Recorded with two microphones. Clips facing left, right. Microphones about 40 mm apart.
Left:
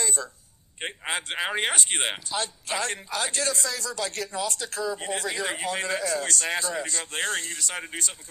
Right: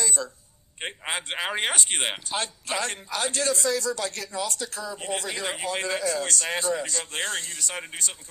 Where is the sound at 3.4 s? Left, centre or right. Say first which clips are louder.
Right 4 dB; left.